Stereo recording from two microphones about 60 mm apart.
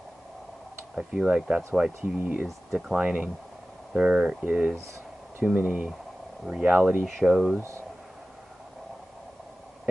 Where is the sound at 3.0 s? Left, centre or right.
Centre.